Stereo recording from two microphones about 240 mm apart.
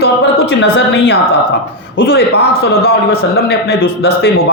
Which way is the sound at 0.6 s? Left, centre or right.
Left.